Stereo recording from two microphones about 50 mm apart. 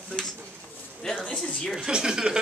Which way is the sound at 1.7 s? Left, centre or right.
Centre.